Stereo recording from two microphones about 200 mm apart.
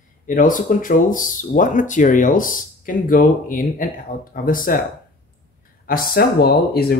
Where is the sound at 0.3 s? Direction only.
40° left (ahead or behind).